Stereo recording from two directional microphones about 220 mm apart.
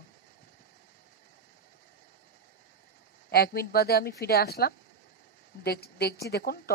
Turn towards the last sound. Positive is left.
turn(degrees=45)  # may be behind; listen again after turning